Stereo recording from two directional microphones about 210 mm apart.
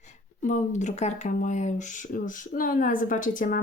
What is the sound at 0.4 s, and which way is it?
Speech, 35° left (ahead or behind).